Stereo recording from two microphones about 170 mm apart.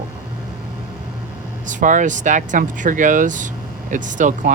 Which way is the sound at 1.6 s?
50° right (ahead or behind).